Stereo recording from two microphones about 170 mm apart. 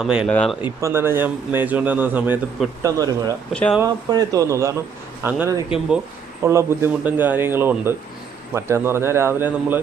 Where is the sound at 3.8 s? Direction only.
20° right (ahead or behind).